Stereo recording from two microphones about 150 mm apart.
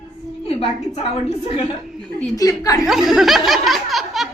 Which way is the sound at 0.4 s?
40° left (ahead or behind).